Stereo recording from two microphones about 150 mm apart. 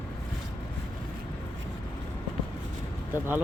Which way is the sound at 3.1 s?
15° right (ahead or behind).